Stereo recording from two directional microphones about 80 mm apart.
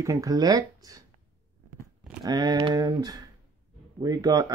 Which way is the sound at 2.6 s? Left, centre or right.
Right.